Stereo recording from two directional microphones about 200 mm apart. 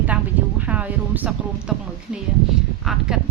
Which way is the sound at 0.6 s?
5° right (ahead or behind).